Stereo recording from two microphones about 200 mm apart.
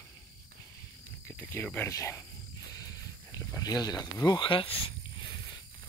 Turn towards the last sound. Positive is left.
turn(degrees=25)  # may be behind; listen again after turning